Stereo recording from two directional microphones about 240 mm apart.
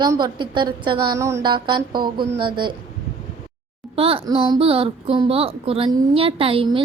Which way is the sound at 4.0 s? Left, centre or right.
Right.